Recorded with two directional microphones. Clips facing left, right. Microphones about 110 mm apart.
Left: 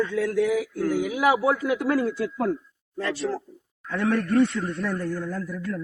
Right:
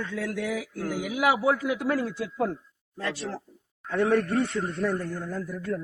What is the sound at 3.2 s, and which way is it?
A man's voice, 15° right (ahead or behind).